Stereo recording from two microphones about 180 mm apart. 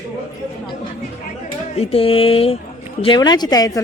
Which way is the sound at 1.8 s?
35° left (ahead or behind).